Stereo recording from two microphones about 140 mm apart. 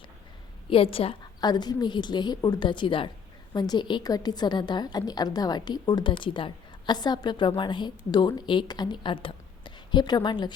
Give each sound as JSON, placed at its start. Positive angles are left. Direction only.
{"t": 0.7, "sound": "a woman's voice", "side_deg": 40}
{"t": 1.4, "sound": "a woman's voice", "side_deg": 30}